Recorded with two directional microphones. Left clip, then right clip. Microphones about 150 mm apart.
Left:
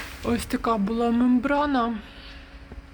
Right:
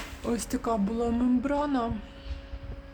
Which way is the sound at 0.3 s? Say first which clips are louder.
Left 5 dB; 15° left (ahead or behind).